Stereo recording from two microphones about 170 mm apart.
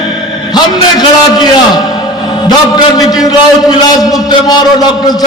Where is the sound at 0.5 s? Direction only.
25° left (ahead or behind).